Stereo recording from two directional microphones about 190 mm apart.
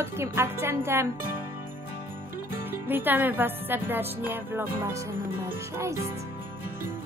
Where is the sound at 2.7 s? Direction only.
10° right (ahead or behind).